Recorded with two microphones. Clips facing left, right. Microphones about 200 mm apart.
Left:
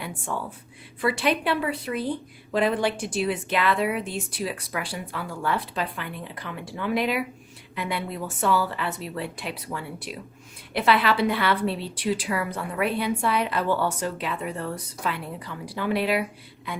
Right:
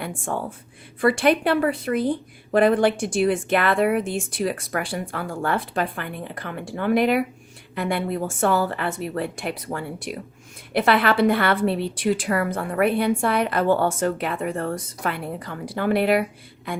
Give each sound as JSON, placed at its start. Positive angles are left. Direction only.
{"t": 1.0, "sound": "a woman's voice", "side_deg": -50}